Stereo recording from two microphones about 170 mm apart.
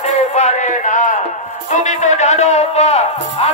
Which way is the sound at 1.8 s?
45° left (ahead or behind).